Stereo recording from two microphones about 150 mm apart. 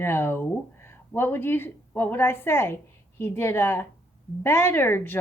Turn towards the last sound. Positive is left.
turn(degrees=15)  # may be behind; listen again after turning